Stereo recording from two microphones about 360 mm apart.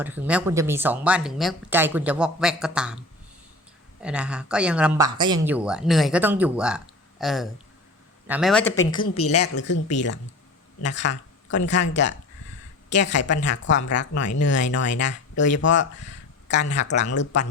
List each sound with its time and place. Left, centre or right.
0.0 s speech: centre
4.0 s speech: centre
9.9 s speech: left
16.7 s speech: centre